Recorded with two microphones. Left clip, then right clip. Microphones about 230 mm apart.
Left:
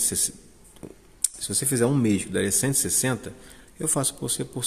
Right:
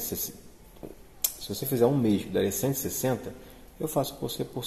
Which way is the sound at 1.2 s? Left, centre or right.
Left.